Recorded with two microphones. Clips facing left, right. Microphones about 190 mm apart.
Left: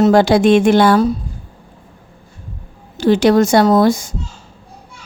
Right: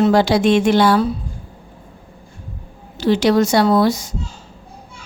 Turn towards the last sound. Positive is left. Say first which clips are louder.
# left 3 dB
turn(degrees=50)  # may be behind; listen again after turning